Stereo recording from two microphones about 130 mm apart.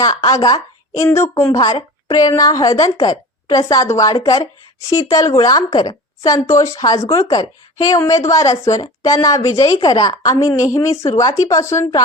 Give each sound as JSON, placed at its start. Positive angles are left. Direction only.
{"t": 0.0, "sound": "speech", "side_deg": 30}
{"t": 1.5, "sound": "speech", "side_deg": 35}